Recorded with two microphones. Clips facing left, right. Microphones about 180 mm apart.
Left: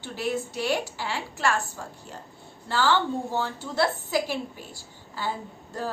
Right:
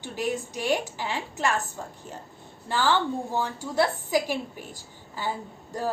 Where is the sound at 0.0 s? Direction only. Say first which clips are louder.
Even; 15° right (ahead or behind).